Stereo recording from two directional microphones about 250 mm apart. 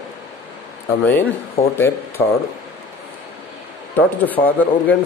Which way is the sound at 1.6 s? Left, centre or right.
Left.